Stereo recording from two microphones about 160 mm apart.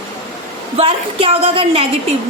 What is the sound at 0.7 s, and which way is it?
A woman's voice, 35° right (ahead or behind).